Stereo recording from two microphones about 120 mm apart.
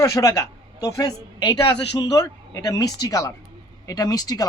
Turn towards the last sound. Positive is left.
turn(degrees=30)  # may be behind; listen again after turning